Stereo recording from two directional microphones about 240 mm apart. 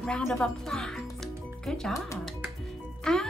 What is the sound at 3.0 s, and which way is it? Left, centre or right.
Music, centre.